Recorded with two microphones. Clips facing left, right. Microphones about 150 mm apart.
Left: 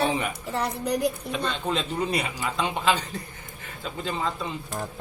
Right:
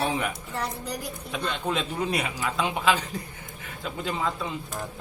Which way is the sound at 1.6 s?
Centre (ahead or behind).